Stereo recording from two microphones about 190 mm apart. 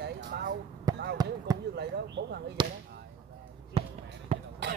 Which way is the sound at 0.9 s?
20° right (ahead or behind).